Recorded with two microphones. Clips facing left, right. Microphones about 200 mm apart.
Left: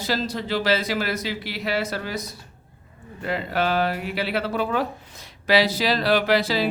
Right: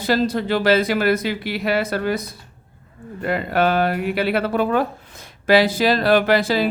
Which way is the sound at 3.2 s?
55° right (ahead or behind).